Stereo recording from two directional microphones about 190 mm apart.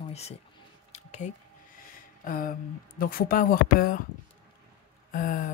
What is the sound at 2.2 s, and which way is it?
Speech, 45° left (ahead or behind).